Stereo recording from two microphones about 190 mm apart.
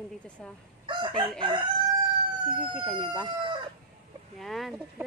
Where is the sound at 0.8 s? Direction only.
25° right (ahead or behind).